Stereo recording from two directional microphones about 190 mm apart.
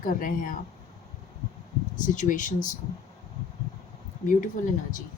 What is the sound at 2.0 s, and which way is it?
Speech, 45° left (ahead or behind).